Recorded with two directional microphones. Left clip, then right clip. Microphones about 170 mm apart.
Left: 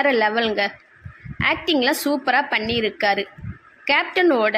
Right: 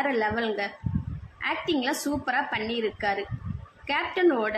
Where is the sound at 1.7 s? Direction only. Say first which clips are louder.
Left 8 dB; 45° left (ahead or behind).